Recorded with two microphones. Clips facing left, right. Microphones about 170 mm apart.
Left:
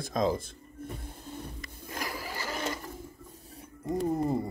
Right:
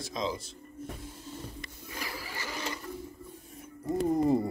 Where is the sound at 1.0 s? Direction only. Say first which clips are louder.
Left 1 dB; 55° left (ahead or behind).